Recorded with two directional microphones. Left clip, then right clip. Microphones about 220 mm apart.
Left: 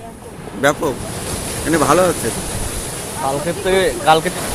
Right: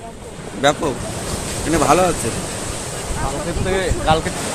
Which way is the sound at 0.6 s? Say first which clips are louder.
Left 1 dB; 5° left (ahead or behind).